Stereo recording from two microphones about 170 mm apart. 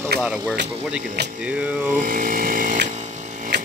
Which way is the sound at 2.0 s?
50° right (ahead or behind).